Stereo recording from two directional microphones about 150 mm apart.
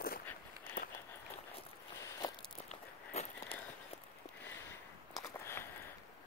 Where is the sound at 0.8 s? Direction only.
65° left (ahead or behind).